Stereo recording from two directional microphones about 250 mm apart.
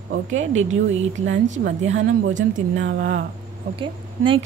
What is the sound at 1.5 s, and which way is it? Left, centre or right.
Speech, right.